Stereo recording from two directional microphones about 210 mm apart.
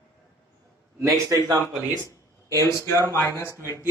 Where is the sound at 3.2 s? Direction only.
10° left (ahead or behind).